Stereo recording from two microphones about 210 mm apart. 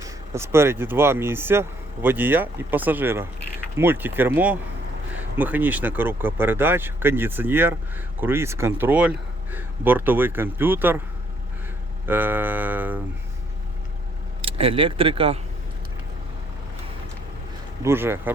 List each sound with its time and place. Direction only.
0.0 s speech: 10° right (ahead or behind)
12.0 s speech: 10° right (ahead or behind)
14.4 s speech: 25° right (ahead or behind)
17.8 s speech: 10° right (ahead or behind)